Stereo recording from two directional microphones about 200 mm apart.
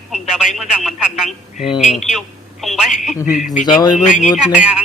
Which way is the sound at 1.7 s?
35° left (ahead or behind).